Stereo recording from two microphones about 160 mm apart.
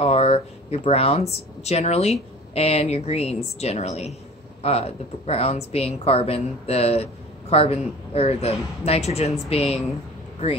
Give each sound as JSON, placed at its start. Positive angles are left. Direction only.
{"t": 0.0, "sound": "a woman's voice", "side_deg": 40}